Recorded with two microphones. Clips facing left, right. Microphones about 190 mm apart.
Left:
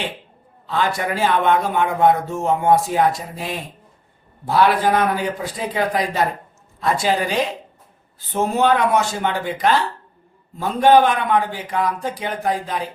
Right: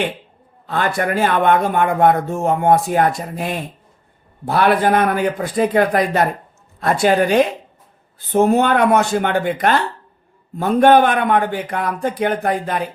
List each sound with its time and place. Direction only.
0.7 s a man's voice: 55° right (ahead or behind)